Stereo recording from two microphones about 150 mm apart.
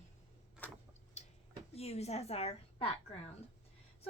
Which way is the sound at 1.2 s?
50° left (ahead or behind).